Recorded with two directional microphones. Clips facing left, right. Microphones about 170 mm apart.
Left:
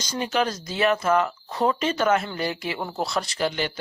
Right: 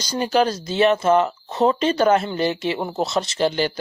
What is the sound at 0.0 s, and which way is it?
Speech, 35° right (ahead or behind).